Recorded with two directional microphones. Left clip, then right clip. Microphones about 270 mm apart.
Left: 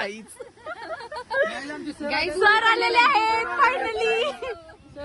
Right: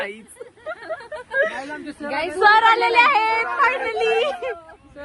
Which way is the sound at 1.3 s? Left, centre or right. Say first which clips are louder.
Right 3 dB; left.